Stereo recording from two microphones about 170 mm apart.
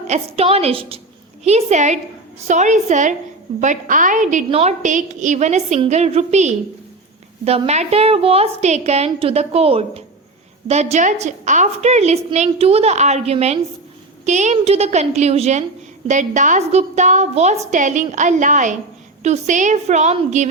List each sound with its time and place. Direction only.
0.1 s a woman's voice: 35° right (ahead or behind)